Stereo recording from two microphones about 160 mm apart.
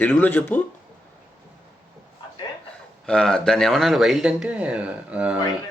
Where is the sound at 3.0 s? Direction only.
5° left (ahead or behind).